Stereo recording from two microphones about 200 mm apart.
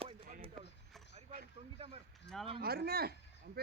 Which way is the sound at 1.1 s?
45° right (ahead or behind).